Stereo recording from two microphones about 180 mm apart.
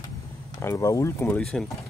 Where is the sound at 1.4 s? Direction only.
5° left (ahead or behind).